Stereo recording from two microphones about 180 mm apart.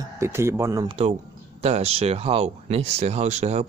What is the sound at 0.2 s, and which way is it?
Speech, 15° right (ahead or behind).